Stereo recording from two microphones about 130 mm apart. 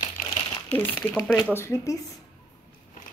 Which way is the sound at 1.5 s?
20° left (ahead or behind).